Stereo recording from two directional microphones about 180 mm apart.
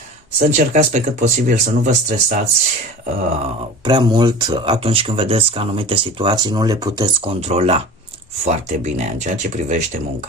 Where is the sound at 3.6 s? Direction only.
25° right (ahead or behind).